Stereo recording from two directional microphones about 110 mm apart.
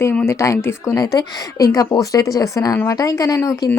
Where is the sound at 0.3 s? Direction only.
25° left (ahead or behind).